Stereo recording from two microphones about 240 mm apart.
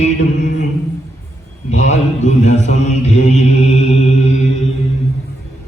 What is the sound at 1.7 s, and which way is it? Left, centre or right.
Mantra, left.